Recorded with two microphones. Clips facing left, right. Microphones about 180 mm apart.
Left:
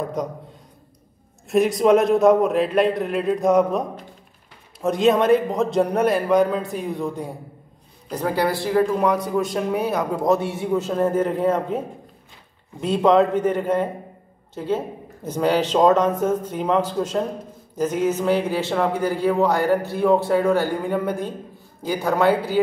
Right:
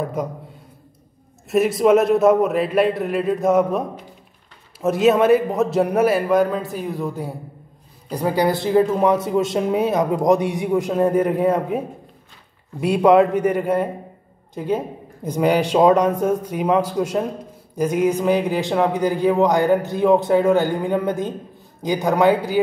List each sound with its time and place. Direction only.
0.2 s speech: 5° right (ahead or behind)
1.5 s a man's voice: centre (ahead or behind)
12.8 s a man's voice: 10° right (ahead or behind)